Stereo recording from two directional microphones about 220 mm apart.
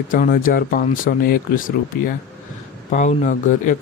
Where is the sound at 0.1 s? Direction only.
40° left (ahead or behind).